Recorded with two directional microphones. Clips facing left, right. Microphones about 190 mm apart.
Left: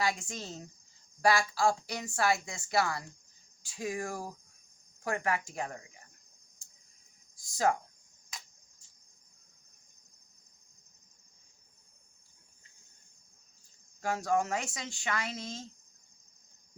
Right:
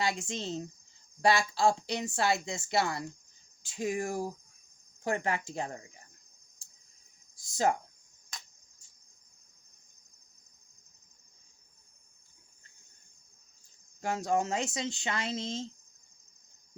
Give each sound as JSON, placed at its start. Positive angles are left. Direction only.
{"t": 0.0, "sound": "a woman's voice", "side_deg": -25}
{"t": 7.5, "sound": "a woman's voice", "side_deg": -25}
{"t": 14.0, "sound": "a woman's voice", "side_deg": -20}